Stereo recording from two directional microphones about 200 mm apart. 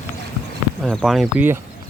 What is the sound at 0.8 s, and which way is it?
Speech, centre (ahead or behind).